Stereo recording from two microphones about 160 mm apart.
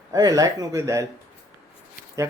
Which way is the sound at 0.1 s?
25° right (ahead or behind).